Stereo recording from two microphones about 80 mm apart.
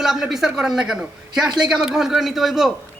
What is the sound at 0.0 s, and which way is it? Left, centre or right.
A woman's voice, centre.